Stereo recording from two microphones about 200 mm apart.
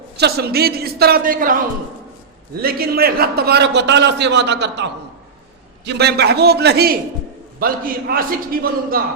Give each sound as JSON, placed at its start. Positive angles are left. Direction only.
{"t": 0.2, "sound": "a man's voice", "side_deg": -55}
{"t": 2.6, "sound": "a man's voice", "side_deg": -50}